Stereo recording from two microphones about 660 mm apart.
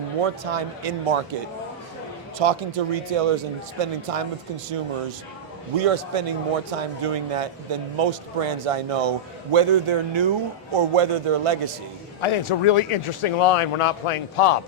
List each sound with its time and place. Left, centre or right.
0.2 s a man's voice: right
2.4 s a man's voice: right
5.8 s a man's voice: right
12.2 s speech: left